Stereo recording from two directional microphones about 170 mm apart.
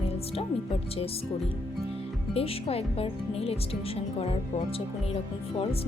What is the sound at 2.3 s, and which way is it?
Speech, 35° left (ahead or behind).